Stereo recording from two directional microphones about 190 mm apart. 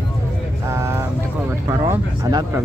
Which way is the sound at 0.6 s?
15° right (ahead or behind).